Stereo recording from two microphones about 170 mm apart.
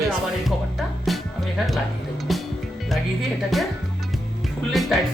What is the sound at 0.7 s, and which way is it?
Music, centre (ahead or behind).